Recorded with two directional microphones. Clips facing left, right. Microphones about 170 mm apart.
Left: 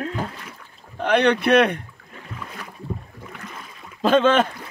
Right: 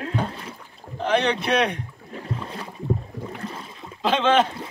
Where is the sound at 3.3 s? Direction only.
30° right (ahead or behind).